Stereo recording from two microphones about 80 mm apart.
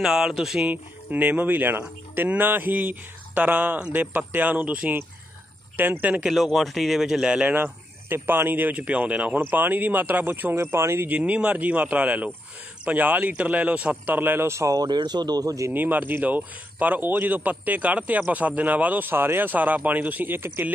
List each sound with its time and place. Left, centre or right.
0.0 s speech: centre
0.7 s speech: centre
6.3 s speech: centre
7.2 s speech: centre
7.5 s speech: right
11.1 s speech: centre; by 14.8 s right
14.8 s speech: right
15.7 s speech: right